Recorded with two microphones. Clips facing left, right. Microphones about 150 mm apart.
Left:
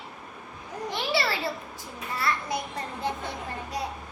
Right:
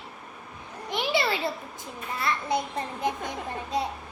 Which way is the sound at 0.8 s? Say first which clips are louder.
Right 2 dB; 20° right (ahead or behind).